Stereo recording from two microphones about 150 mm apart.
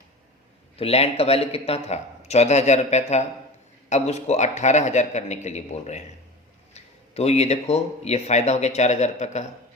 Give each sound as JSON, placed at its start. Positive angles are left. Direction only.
{"t": 0.8, "sound": "speech", "side_deg": 40}